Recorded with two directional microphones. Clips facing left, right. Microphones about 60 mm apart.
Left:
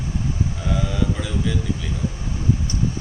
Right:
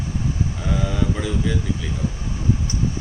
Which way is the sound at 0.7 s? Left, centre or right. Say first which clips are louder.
Right 1 dB; centre.